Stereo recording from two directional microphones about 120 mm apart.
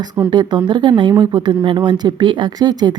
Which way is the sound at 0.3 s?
40° right (ahead or behind).